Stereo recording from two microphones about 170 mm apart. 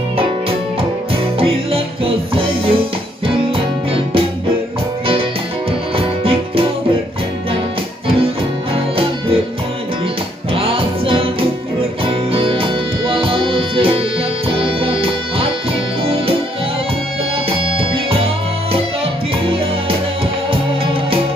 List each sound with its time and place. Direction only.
1.1 s music: 35° right (ahead or behind)
5.9 s music: 35° right (ahead or behind)
8.7 s music: 35° right (ahead or behind)
10.5 s music: 30° right (ahead or behind)
19.4 s music: 35° right (ahead or behind)